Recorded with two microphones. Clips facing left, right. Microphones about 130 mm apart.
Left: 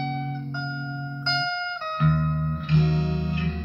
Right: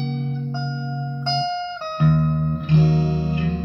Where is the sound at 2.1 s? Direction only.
30° right (ahead or behind).